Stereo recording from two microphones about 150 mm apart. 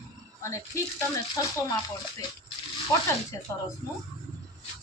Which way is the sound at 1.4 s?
20° left (ahead or behind).